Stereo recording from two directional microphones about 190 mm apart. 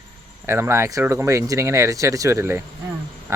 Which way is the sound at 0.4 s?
15° right (ahead or behind).